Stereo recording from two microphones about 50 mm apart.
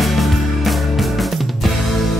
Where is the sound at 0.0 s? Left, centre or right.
Centre.